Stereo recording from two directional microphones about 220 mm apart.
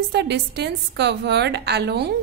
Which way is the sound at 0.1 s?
50° right (ahead or behind).